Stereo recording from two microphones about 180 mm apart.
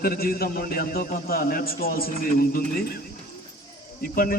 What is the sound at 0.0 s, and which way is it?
A man's voice, 55° left (ahead or behind).